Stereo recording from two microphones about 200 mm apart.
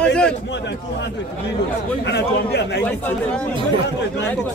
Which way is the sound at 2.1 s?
55° left (ahead or behind).